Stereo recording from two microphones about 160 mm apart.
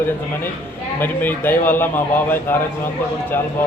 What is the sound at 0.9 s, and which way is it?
Speech, 10° left (ahead or behind).